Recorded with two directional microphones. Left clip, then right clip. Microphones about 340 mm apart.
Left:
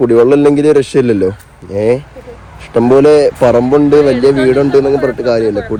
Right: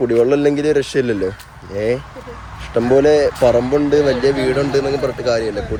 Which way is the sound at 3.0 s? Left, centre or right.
Centre.